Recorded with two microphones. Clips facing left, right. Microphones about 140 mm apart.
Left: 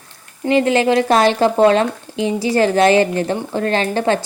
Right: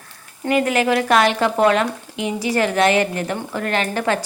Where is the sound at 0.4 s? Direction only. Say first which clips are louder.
Left 4 dB; 25° left (ahead or behind).